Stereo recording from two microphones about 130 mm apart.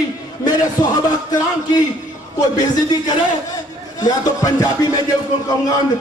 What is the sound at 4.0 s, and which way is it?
Speech, 30° left (ahead or behind).